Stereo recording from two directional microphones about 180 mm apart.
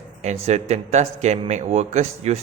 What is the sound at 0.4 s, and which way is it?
A man's voice, 35° right (ahead or behind).